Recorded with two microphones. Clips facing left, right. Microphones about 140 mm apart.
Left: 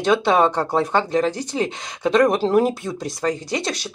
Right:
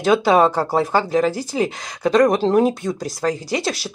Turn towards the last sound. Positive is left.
turn(degrees=-5)  # may be behind; listen again after turning